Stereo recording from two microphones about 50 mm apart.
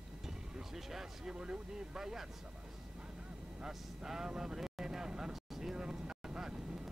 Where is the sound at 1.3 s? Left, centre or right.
Centre.